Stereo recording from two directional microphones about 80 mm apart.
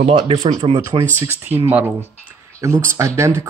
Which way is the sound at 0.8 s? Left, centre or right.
Right.